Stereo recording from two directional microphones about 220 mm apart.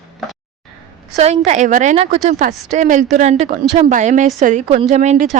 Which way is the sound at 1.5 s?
35° right (ahead or behind).